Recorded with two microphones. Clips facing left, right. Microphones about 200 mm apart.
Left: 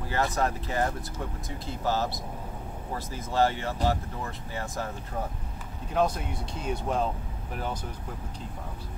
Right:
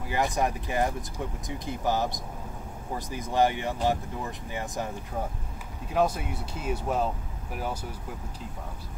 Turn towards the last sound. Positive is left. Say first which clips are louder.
# even
turn(degrees=-5)  # may be behind; listen again after turning